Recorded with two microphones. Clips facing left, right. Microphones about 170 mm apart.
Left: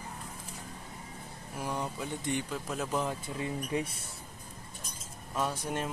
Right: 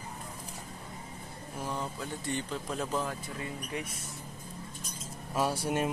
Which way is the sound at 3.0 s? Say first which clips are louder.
Left 2 dB; 20° left (ahead or behind).